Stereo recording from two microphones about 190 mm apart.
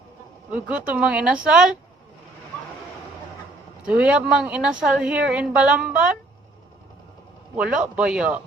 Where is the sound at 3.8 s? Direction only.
5° right (ahead or behind).